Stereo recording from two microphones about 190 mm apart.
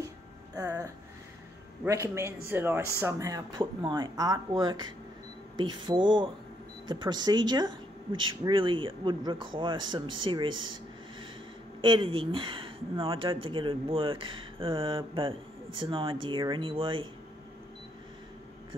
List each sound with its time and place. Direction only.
0.6 s a sound: 20° right (ahead or behind)
1.9 s speech: 15° right (ahead or behind)
10.5 s speech: 90° right
11.8 s speech: 25° right (ahead or behind)